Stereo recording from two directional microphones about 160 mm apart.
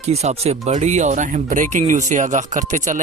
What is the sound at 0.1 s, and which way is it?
Speech, 40° right (ahead or behind).